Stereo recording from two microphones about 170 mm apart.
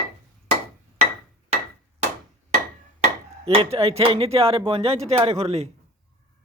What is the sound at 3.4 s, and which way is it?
Speech, 35° right (ahead or behind).